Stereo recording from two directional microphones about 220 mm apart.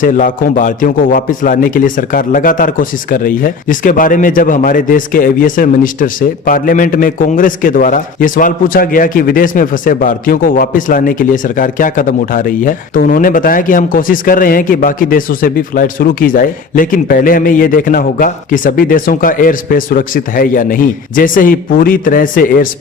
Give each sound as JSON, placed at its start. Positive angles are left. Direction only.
{"t": 0.0, "sound": "a man's voice", "side_deg": 35}